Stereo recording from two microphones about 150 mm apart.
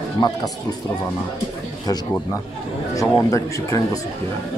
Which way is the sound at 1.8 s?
25° left (ahead or behind).